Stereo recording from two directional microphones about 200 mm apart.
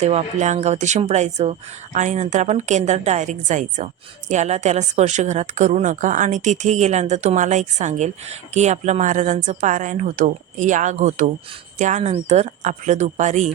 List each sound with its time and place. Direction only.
0.0 s a woman's voice: 35° right (ahead or behind)